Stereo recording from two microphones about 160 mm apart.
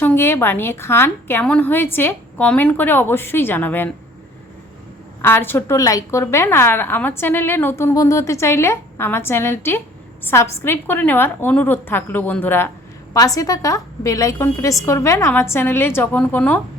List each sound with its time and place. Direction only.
0.0 s a woman's voice: 15° left (ahead or behind)
5.2 s a woman's voice: 15° left (ahead or behind)